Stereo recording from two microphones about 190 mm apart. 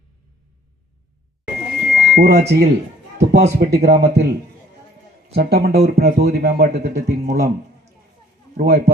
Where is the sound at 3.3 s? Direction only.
40° right (ahead or behind).